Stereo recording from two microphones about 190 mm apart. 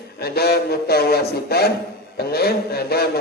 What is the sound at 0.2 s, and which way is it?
Speech, 55° left (ahead or behind).